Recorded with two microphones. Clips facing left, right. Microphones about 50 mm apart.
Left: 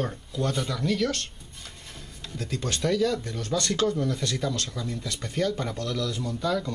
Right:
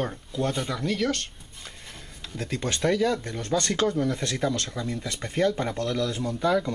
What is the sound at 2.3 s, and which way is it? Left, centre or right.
Speech, right.